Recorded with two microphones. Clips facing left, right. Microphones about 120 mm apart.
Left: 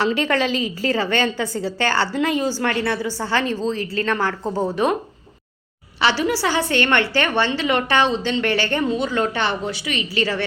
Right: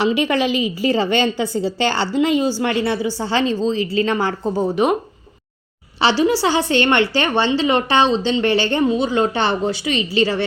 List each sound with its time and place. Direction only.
0.0 s a woman's voice: 15° right (ahead or behind)
6.0 s a woman's voice: 25° right (ahead or behind)